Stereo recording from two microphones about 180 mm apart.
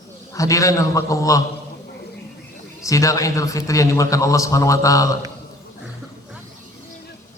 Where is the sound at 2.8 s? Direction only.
15° left (ahead or behind).